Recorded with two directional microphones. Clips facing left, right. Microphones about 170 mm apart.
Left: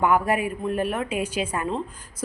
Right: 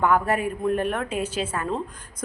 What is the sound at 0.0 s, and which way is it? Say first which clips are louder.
A woman's voice: even; 10° left (ahead or behind).